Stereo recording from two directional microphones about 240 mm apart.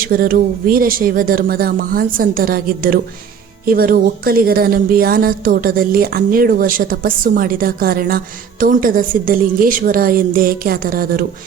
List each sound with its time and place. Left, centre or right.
0.0 s a woman's voice: right